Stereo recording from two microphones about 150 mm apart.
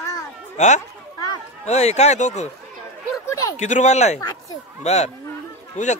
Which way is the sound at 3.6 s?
50° left (ahead or behind).